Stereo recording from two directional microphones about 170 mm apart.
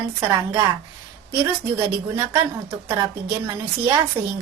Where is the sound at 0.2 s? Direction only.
20° right (ahead or behind).